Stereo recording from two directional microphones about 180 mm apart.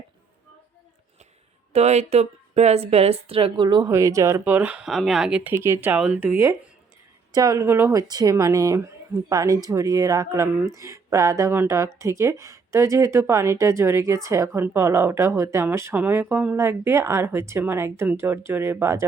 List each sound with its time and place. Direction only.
1.7 s speech: 35° right (ahead or behind); by 19.0 s 15° right (ahead or behind)